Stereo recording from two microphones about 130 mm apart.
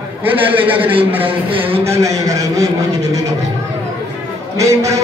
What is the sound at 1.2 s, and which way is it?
Speech, 45° right (ahead or behind).